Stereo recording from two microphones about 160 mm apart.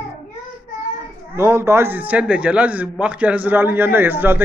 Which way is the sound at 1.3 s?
15° right (ahead or behind).